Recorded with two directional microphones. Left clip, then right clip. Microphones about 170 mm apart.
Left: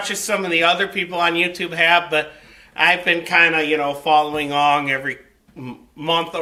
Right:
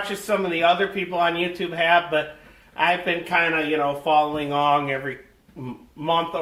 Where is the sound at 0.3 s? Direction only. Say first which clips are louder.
Left 2 dB; 15° left (ahead or behind).